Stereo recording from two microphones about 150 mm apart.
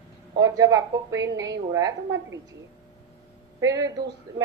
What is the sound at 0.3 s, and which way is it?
A woman's voice, 25° right (ahead or behind).